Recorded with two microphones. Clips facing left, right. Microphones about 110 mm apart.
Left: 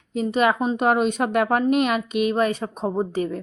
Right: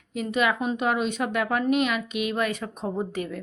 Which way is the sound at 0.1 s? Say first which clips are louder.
Left 4 dB; 35° left (ahead or behind).